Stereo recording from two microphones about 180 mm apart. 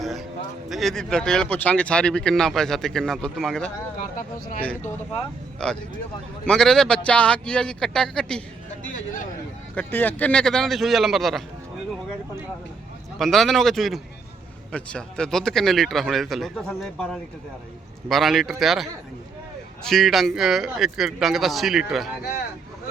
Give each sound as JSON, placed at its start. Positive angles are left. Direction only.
{"t": 0.0, "sound": "a sound", "side_deg": 0}
{"t": 0.7, "sound": "speech", "side_deg": 0}
{"t": 5.6, "sound": "speech", "side_deg": 5}
{"t": 9.7, "sound": "speech", "side_deg": 10}
{"t": 13.1, "sound": "speech", "side_deg": 0}